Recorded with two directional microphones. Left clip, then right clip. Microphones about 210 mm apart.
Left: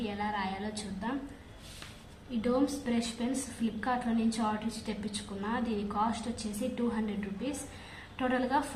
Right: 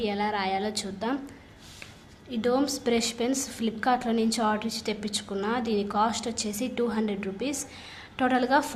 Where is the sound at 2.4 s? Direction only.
60° right (ahead or behind).